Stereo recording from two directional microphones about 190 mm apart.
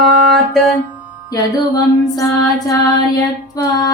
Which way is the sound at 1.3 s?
20° left (ahead or behind).